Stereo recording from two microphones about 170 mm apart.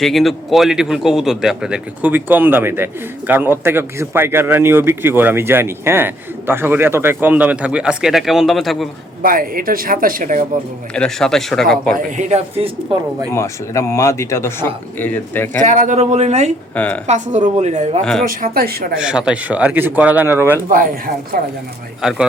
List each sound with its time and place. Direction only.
0.0 s a man's voice: centre (ahead or behind)
9.2 s speech: 55° right (ahead or behind)
10.9 s speech: 5° left (ahead or behind)
11.9 s speech: 45° right (ahead or behind)
13.3 s speech: 15° left (ahead or behind)
15.6 s speech: 45° right (ahead or behind)
16.7 s speech: 5° left (ahead or behind)
17.1 s a woman's voice: 40° right (ahead or behind)
18.0 s speech: centre (ahead or behind)
18.3 s speech: 55° right (ahead or behind)
18.9 s a man's voice: 5° right (ahead or behind)
20.7 s a woman's voice: 55° right (ahead or behind)
22.0 s speech: 5° right (ahead or behind)